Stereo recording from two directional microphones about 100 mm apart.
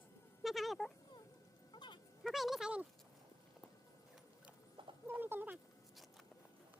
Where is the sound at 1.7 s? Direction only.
50° left (ahead or behind).